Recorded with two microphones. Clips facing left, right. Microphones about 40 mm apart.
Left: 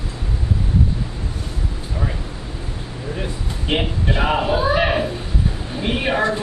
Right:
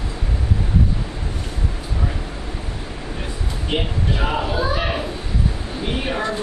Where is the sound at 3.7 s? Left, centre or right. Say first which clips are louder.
Left 2 dB; left.